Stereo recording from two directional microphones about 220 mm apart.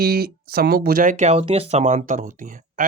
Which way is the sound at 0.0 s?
45° right (ahead or behind).